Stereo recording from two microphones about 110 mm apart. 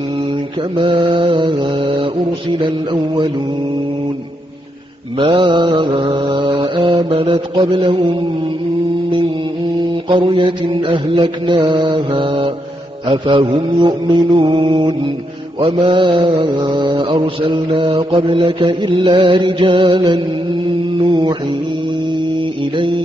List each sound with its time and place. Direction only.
1.0 s mantra: 55° right (ahead or behind)
5.2 s mantra: 55° right (ahead or behind)
10.0 s mantra: 50° right (ahead or behind)
16.7 s mantra: 45° right (ahead or behind)
22.8 s mantra: 55° right (ahead or behind)